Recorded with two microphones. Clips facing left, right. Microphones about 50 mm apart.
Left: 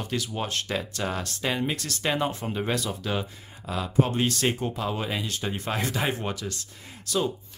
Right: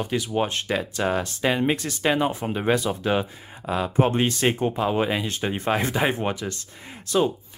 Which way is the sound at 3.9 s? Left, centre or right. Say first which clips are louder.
Right 2 dB; right.